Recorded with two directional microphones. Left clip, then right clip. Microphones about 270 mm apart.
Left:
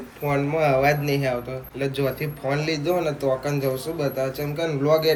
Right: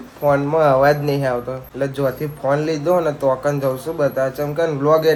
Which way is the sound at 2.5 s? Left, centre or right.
Centre.